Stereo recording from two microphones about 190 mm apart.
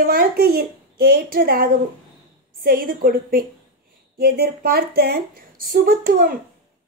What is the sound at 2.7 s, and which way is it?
Speech, 50° right (ahead or behind).